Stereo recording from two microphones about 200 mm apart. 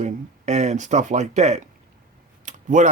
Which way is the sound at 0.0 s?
35° right (ahead or behind).